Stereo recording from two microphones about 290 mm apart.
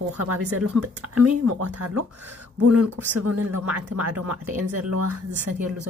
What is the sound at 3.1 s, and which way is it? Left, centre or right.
Speech, right.